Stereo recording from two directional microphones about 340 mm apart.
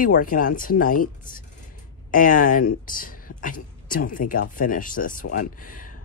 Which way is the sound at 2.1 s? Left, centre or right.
Left.